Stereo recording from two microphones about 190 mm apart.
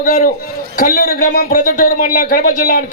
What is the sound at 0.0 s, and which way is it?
A man's voice, 50° left (ahead or behind).